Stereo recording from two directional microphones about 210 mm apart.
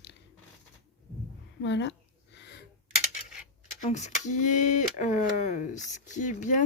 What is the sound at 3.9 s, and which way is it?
Speech, 35° left (ahead or behind).